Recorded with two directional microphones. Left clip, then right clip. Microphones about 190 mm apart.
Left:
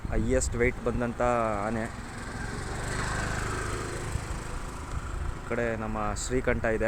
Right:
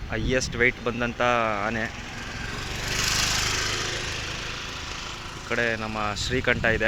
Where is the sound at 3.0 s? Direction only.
30° left (ahead or behind).